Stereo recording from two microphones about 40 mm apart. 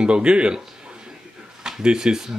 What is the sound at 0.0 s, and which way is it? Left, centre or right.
Speech, right.